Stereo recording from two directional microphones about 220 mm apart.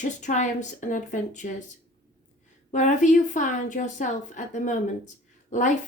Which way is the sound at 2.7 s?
35° left (ahead or behind).